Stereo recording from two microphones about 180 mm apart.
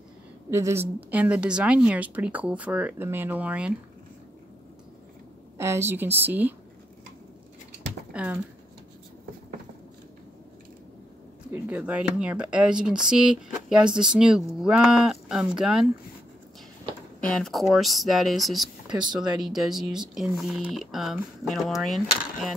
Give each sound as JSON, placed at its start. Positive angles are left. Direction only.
{"t": 0.5, "sound": "a woman's voice", "side_deg": -15}
{"t": 5.6, "sound": "a woman's voice", "side_deg": -15}
{"t": 8.1, "sound": "speech", "side_deg": -5}
{"t": 11.5, "sound": "speech", "side_deg": -10}
{"t": 17.2, "sound": "speech", "side_deg": 5}
{"t": 18.9, "sound": "speech", "side_deg": -25}
{"t": 19.3, "sound": "speech", "side_deg": 0}